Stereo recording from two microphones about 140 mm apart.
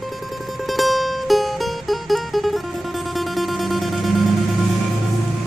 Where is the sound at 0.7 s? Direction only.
Centre (ahead or behind).